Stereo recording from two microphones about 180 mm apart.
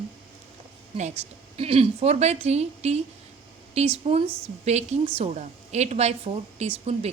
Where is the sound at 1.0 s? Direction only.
40° right (ahead or behind).